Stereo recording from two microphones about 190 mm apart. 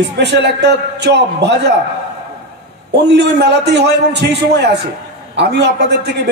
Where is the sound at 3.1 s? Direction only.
65° right (ahead or behind).